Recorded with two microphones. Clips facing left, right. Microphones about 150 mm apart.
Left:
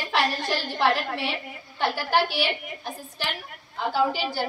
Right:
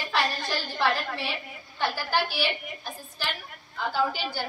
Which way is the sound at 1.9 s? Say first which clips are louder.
Left 7 dB; 65° left (ahead or behind).